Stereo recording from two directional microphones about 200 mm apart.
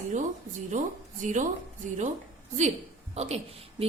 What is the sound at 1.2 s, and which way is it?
Speech, 40° right (ahead or behind).